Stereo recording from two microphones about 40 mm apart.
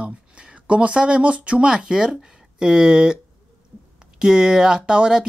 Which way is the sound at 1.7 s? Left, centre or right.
Centre.